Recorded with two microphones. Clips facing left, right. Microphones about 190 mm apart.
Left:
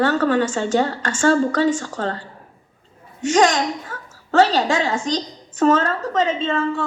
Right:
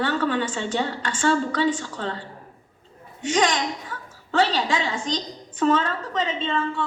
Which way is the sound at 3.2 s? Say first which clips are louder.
Left 6 dB; 45° left (ahead or behind).